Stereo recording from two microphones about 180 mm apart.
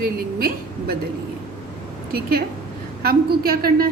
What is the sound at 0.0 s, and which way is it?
Speech, 55° right (ahead or behind).